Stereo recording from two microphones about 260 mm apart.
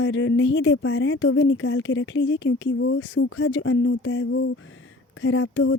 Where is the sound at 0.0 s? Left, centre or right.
Left.